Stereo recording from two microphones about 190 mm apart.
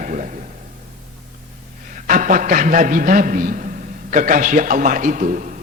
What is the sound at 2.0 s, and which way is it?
A man's voice, 45° right (ahead or behind).